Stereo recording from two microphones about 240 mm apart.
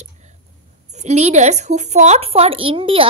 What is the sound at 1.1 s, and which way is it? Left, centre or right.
Speech, right.